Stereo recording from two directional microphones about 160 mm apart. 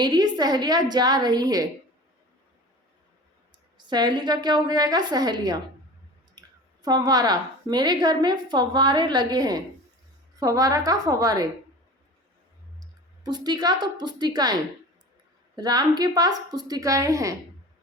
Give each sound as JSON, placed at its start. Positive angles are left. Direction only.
{"t": 0.0, "sound": "a woman's voice", "side_deg": -25}
{"t": 3.8, "sound": "a woman's voice", "side_deg": -25}
{"t": 6.8, "sound": "a woman's voice", "side_deg": -25}
{"t": 13.2, "sound": "a woman's voice", "side_deg": -25}